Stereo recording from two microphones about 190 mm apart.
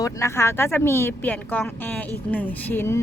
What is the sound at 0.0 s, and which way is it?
Speech, 15° left (ahead or behind).